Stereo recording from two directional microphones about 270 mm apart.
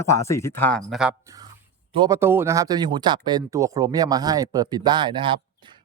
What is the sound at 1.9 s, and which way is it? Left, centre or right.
Speech, centre.